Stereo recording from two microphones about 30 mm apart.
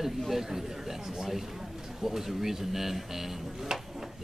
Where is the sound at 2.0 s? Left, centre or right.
Centre.